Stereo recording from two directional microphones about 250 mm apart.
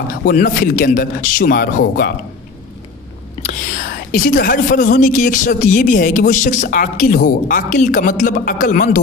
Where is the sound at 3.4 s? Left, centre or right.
Left.